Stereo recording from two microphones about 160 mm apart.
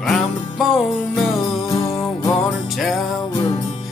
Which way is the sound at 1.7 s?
20° left (ahead or behind).